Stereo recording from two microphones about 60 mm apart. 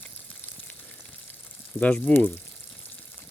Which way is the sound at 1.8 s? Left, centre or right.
Left.